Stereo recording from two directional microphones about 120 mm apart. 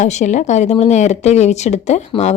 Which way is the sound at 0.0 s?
80° left.